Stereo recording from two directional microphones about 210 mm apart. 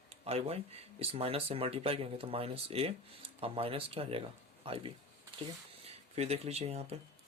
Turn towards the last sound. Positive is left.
turn(degrees=-30)  # may be behind; listen again after turning